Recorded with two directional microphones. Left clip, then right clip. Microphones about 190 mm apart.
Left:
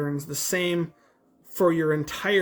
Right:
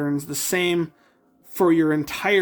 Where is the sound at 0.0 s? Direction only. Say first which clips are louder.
Right 4 dB; 45° right (ahead or behind).